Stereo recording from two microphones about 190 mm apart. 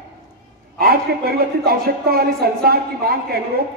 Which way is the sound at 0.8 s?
55° right (ahead or behind).